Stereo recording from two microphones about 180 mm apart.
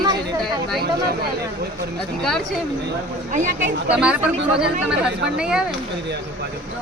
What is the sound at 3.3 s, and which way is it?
Speech, 45° right (ahead or behind).